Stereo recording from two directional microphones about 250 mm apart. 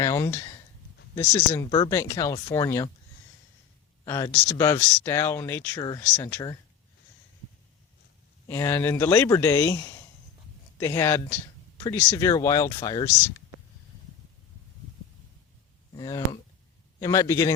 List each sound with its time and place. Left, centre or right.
0.0 s speech: centre
4.0 s speech: centre
8.4 s speech: centre
16.0 s speech: centre